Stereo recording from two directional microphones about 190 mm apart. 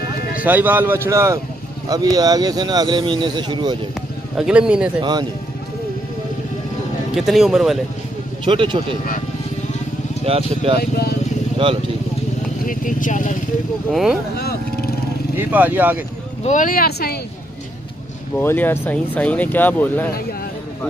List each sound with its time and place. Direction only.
0.3 s speech: 10° right (ahead or behind)
4.4 s speech: 5° right (ahead or behind)
7.2 s speech: centre (ahead or behind)
8.5 s speech: 25° right (ahead or behind)
10.2 s speech: 30° right (ahead or behind)
10.8 s speech: 55° left (ahead or behind)
11.5 s speech: 30° right (ahead or behind)
12.6 s speech: 45° left (ahead or behind)
15.3 s speech: 10° right (ahead or behind)
16.4 s speech: 45° left (ahead or behind)
18.4 s speech: 10° left (ahead or behind)